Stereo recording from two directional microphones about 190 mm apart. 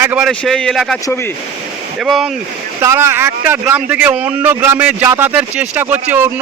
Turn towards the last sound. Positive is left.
turn(degrees=-10)  # may be behind; listen again after turning